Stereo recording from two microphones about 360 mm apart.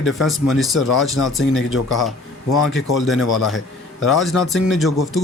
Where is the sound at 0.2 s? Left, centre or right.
Centre.